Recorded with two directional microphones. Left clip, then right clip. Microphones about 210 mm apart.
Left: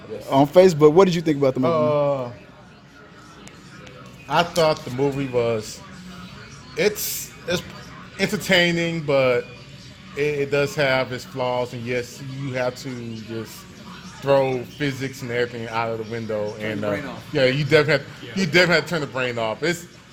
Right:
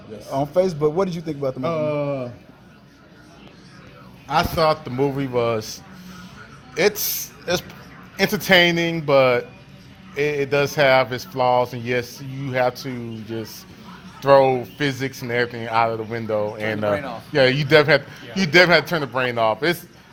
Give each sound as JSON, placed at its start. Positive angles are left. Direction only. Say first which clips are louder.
{"t": 0.3, "sound": "speech", "louder": "left 6 dB", "side_deg": 40}
{"t": 1.6, "sound": "speech", "louder": "left 2 dB", "side_deg": -10}
{"t": 4.3, "sound": "speech", "louder": "even", "side_deg": -40}
{"t": 14.3, "sound": "speech", "louder": "right 5 dB", "side_deg": -45}